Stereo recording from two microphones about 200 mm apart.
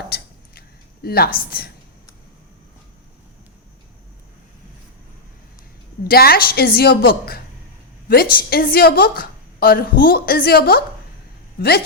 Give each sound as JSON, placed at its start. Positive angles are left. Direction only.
{"t": 0.1, "sound": "a sound", "side_deg": 50}
{"t": 1.0, "sound": "a woman's voice", "side_deg": 50}
{"t": 6.1, "sound": "a woman's voice", "side_deg": 50}